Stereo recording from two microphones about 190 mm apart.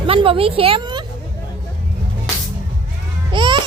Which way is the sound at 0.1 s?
30° right (ahead or behind).